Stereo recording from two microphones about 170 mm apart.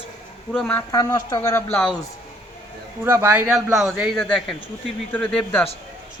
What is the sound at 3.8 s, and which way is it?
Speech, centre (ahead or behind).